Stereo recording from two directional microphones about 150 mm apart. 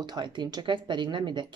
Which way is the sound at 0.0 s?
30° right (ahead or behind).